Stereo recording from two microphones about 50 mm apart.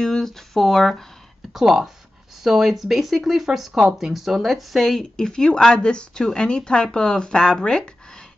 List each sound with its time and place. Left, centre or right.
0.0 s speech: centre
1.5 s speech: centre
5.1 s speech: centre